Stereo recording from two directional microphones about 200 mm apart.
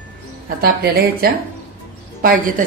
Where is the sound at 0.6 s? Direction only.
50° right (ahead or behind).